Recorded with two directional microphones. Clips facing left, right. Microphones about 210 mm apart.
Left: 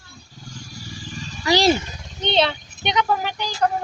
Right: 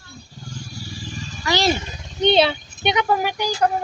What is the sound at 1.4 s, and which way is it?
Speech, 35° left (ahead or behind).